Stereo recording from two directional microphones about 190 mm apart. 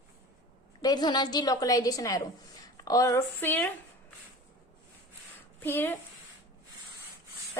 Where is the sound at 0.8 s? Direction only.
20° left (ahead or behind).